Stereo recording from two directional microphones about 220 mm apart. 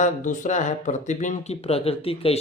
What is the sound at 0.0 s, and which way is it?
Speech, 35° left (ahead or behind).